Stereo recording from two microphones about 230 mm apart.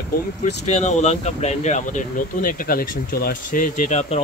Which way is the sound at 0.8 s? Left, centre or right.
Left.